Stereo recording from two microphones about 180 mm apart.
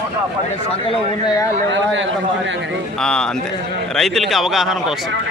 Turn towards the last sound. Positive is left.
turn(degrees=0)  # may be behind; listen again after turning